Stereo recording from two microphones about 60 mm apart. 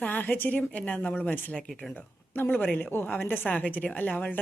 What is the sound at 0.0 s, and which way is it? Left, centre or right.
A woman's voice, left.